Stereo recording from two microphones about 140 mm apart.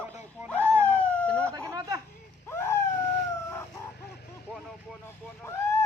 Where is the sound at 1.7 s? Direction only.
25° right (ahead or behind).